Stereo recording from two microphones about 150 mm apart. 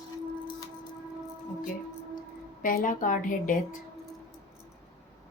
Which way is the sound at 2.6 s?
60° left (ahead or behind).